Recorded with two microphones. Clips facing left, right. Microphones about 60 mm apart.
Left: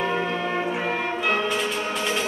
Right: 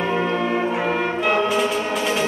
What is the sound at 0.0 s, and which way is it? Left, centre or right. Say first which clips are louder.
Music: right 4 dB; centre.